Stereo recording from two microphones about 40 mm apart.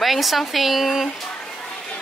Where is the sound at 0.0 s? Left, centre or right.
Centre.